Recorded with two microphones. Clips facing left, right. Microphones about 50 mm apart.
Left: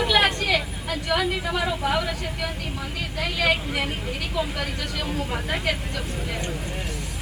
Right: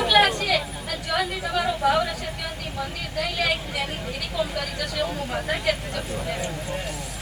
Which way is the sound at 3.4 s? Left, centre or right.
Left.